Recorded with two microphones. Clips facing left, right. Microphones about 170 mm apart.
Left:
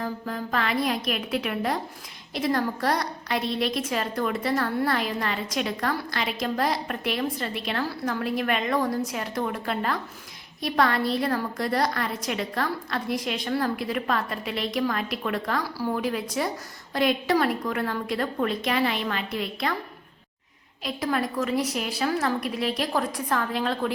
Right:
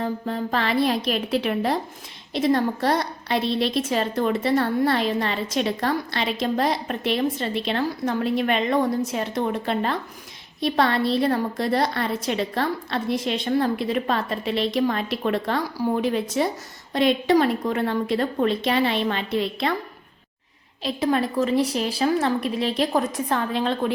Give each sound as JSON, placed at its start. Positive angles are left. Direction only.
{"t": 0.0, "sound": "a woman's voice", "side_deg": -25}
{"t": 20.8, "sound": "a woman's voice", "side_deg": -25}